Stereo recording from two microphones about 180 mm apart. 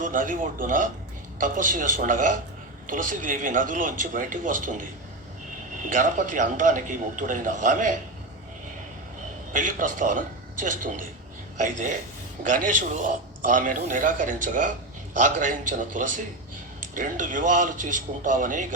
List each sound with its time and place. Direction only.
0.0 s speech: 45° right (ahead or behind)
9.5 s speech: 45° right (ahead or behind)